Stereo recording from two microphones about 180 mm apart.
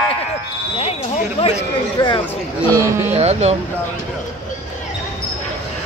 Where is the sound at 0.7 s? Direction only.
35° left (ahead or behind).